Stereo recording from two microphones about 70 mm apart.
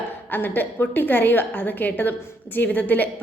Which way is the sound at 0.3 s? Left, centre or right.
Left.